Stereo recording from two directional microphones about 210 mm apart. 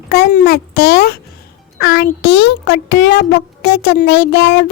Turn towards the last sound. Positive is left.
turn(degrees=55)  # may be behind; listen again after turning